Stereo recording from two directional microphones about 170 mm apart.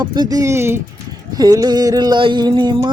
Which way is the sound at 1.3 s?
20° right (ahead or behind).